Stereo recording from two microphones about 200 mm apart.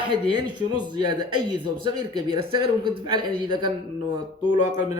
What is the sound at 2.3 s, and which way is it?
Speech, 25° right (ahead or behind).